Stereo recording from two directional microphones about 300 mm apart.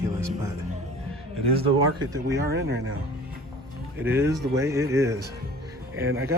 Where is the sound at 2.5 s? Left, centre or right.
Right.